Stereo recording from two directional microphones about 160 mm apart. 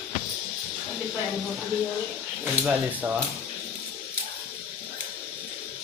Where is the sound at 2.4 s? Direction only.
5° right (ahead or behind).